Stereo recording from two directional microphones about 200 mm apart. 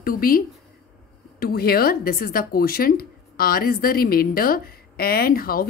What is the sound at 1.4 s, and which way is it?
A woman's voice, 50° left (ahead or behind).